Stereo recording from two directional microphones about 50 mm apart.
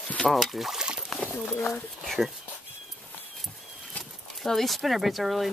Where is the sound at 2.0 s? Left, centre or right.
Centre.